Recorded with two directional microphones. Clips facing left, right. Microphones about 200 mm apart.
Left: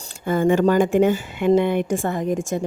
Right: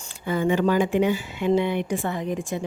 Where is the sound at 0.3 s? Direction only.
50° left (ahead or behind).